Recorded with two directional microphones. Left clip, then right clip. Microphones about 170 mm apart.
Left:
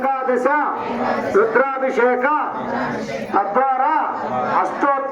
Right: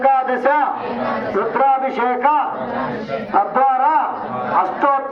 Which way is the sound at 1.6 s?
10° left (ahead or behind).